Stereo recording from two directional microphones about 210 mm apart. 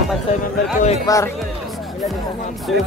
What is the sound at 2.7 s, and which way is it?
Speech, centre (ahead or behind).